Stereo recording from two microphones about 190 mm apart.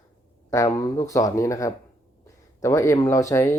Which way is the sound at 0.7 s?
20° left (ahead or behind).